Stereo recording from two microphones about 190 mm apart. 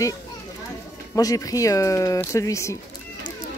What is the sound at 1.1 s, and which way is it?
Speech, 20° left (ahead or behind).